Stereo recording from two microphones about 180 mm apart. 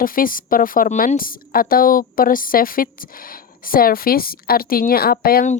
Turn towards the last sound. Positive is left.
turn(degrees=55)  # may be behind; listen again after turning